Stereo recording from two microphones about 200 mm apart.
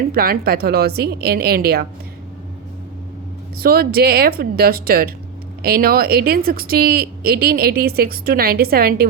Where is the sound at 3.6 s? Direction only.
50° right (ahead or behind).